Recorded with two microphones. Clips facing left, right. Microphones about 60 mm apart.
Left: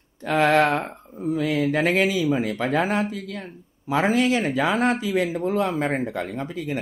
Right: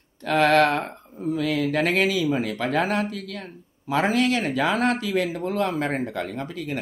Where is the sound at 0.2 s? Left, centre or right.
Centre.